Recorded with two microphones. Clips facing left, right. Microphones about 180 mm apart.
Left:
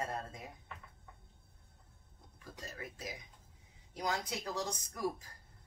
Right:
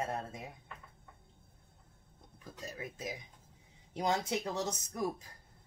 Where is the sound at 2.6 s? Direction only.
20° right (ahead or behind).